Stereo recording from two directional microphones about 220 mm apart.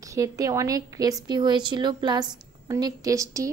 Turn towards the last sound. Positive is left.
turn(degrees=-15)  # may be behind; listen again after turning